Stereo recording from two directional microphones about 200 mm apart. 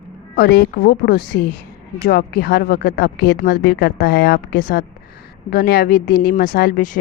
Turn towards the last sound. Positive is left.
turn(degrees=40)  # may be behind; listen again after turning